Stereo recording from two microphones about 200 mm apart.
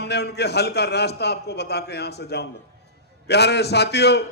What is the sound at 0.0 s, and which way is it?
A man's voice, 55° left (ahead or behind).